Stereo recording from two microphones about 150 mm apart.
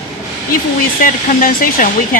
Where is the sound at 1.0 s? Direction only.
70° left (ahead or behind).